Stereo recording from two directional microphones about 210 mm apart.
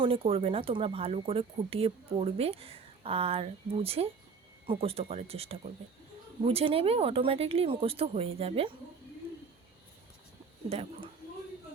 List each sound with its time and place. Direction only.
0.0 s speech: 25° right (ahead or behind)
10.7 s speech: 30° right (ahead or behind)